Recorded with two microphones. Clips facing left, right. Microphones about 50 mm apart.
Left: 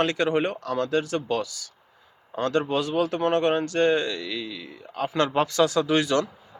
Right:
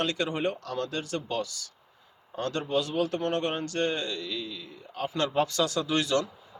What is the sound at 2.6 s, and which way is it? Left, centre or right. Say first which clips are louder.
A man's voice: left 4 dB; left.